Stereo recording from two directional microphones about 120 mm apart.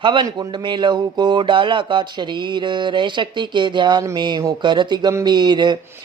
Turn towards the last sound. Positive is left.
turn(degrees=-40)  # may be behind; listen again after turning